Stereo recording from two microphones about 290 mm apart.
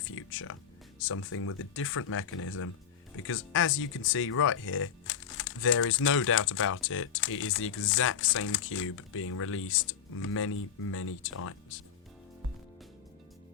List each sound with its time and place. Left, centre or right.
0.2 s speech: left